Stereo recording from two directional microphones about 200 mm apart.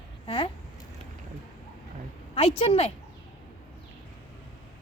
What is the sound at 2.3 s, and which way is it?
Speech, 30° left (ahead or behind).